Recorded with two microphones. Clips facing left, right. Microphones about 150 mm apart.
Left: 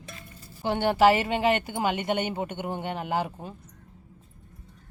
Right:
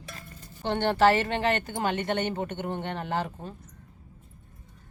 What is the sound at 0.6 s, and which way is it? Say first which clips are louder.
Speech: left 1 dB; 10° left (ahead or behind).